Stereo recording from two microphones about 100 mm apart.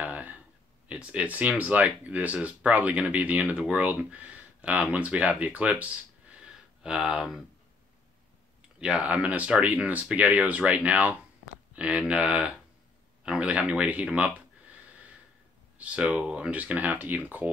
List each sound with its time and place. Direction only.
0.0 s a sound: 15° right (ahead or behind)
0.8 s speech: 10° right (ahead or behind)
8.7 s speech: 10° right (ahead or behind)
15.8 s speech: 10° right (ahead or behind)